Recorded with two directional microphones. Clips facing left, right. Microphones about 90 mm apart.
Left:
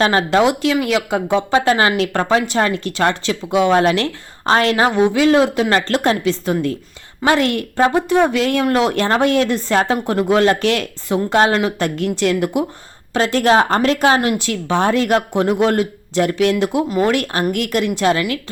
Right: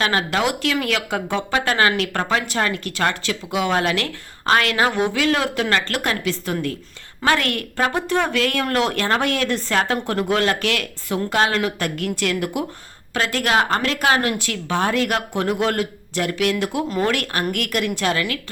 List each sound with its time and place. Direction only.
0.0 s speech: 30° left (ahead or behind)